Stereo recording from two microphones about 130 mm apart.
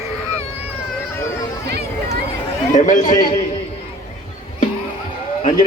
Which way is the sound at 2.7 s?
75° left (ahead or behind).